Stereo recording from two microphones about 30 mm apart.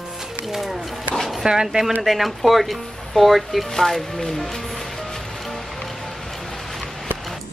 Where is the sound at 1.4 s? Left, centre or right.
Right.